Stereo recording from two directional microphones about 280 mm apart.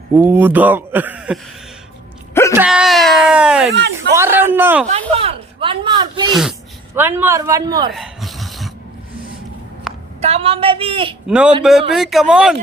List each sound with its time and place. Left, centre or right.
0.2 s speech: centre
2.3 s a sound: centre
2.6 s a sound: centre
3.7 s speech: right
4.1 s speech: centre
4.9 s speech: right
7.9 s a sound: centre
10.2 s a woman's voice: right
11.3 s speech: centre